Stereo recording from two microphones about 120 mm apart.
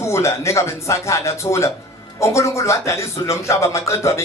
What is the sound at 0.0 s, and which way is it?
Speech, 25° left (ahead or behind).